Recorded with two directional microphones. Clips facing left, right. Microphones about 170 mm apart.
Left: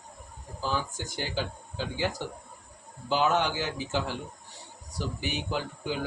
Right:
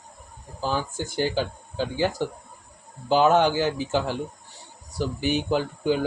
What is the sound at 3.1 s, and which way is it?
Speech, 40° right (ahead or behind).